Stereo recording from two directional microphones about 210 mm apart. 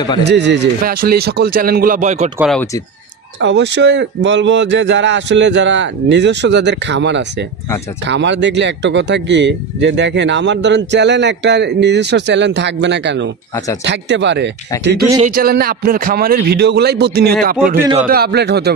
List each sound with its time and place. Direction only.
0.2 s a man's voice: 55° right (ahead or behind); by 2.3 s 35° right (ahead or behind)
3.3 s speech: 60° right (ahead or behind)
15.2 s a man's voice: 45° right (ahead or behind)